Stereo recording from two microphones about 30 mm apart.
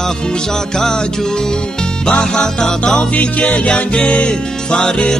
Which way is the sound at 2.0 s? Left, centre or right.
Left.